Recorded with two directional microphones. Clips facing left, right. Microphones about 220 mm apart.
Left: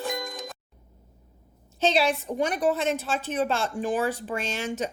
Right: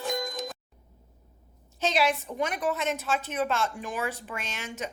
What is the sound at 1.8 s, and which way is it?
A woman's voice, 30° left (ahead or behind).